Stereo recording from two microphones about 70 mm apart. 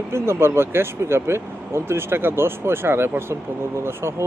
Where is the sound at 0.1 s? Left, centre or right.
Right.